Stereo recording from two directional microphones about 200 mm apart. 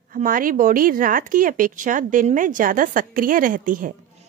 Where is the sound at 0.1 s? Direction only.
45° right (ahead or behind).